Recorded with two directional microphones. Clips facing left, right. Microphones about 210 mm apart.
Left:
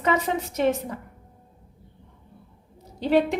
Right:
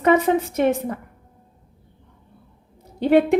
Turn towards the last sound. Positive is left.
turn(degrees=-55)  # may be behind; listen again after turning